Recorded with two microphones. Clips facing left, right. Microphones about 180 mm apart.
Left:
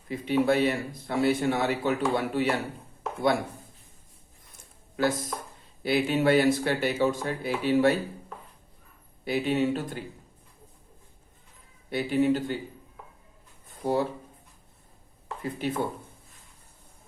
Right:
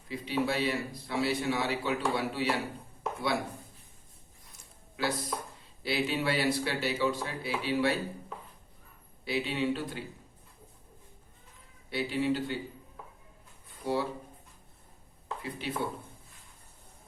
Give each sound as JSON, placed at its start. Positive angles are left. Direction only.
{"t": 0.1, "sound": "speech", "side_deg": 50}
{"t": 4.9, "sound": "speech", "side_deg": 45}
{"t": 9.2, "sound": "speech", "side_deg": 50}
{"t": 11.9, "sound": "speech", "side_deg": 50}
{"t": 13.7, "sound": "a sound", "side_deg": 45}
{"t": 15.4, "sound": "speech", "side_deg": 45}